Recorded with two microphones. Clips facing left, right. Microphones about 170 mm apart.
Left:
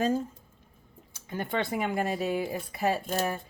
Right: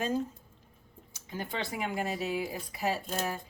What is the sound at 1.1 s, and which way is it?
Speech, 55° left (ahead or behind).